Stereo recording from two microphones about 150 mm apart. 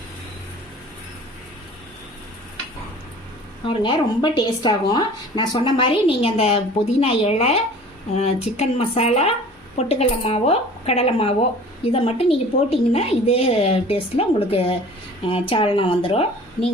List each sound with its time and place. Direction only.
3.7 s a woman's voice: 30° left (ahead or behind)